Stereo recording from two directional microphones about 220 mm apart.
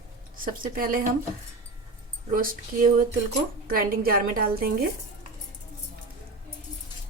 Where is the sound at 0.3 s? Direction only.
40° right (ahead or behind).